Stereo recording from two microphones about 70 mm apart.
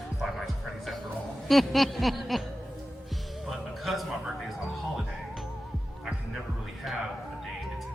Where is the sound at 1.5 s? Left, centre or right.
Centre.